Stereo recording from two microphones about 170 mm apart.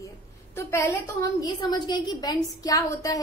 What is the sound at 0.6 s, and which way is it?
A woman's voice, 15° left (ahead or behind).